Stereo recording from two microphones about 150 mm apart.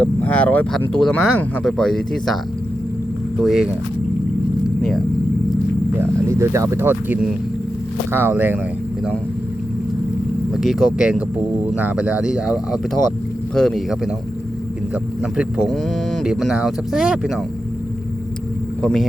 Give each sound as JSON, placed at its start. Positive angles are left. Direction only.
{"t": 0.0, "sound": "speech", "side_deg": 10}
{"t": 3.4, "sound": "speech", "side_deg": -5}
{"t": 4.8, "sound": "speech", "side_deg": 0}
{"t": 6.0, "sound": "speech", "side_deg": -20}
{"t": 10.5, "sound": "speech", "side_deg": 0}
{"t": 15.2, "sound": "speech", "side_deg": -5}
{"t": 18.8, "sound": "speech", "side_deg": 5}